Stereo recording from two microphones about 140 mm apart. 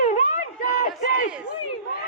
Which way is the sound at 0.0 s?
60° left (ahead or behind).